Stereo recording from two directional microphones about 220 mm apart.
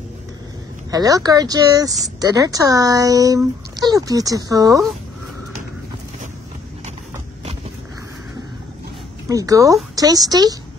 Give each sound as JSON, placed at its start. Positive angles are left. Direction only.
{"t": 0.9, "sound": "speech", "side_deg": -15}
{"t": 9.3, "sound": "speech", "side_deg": -15}